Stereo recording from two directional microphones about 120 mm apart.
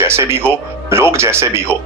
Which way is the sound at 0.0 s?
20° right (ahead or behind).